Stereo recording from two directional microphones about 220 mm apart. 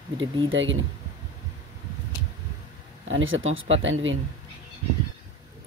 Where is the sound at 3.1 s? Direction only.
60° right (ahead or behind).